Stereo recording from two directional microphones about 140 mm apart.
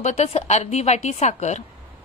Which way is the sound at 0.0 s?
50° left (ahead or behind).